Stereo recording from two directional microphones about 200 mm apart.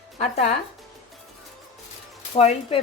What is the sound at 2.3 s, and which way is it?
Speech, 30° left (ahead or behind).